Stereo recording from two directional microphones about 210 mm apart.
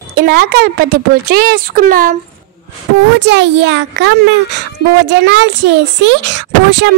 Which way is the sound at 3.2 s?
55° right (ahead or behind).